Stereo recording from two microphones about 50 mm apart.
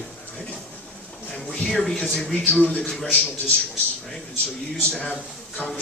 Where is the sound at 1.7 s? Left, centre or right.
Centre.